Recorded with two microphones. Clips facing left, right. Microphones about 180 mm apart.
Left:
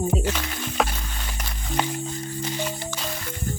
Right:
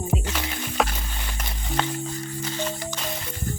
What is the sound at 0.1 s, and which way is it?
Speech, centre (ahead or behind).